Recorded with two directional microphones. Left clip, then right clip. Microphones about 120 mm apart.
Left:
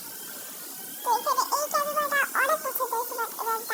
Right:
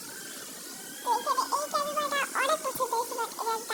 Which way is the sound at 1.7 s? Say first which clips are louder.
Left 5 dB; 5° right (ahead or behind).